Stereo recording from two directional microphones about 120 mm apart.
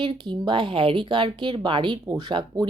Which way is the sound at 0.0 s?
45° right (ahead or behind).